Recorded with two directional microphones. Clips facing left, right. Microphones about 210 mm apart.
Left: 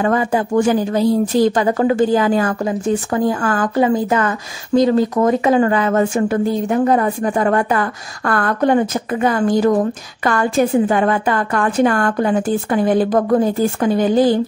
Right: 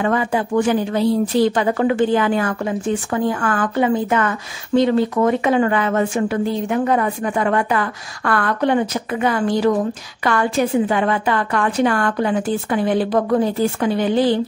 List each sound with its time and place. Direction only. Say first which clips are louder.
0.0 s a woman's voice: left 2 dB; 40° left (ahead or behind)